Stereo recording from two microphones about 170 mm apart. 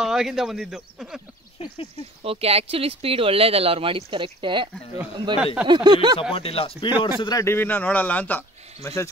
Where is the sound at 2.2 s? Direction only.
35° right (ahead or behind).